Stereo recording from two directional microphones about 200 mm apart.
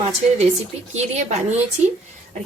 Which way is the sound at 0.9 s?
35° right (ahead or behind).